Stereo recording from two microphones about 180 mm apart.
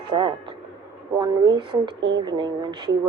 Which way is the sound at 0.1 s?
30° right (ahead or behind).